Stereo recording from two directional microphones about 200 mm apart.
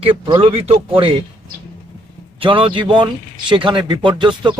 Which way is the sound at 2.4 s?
25° right (ahead or behind).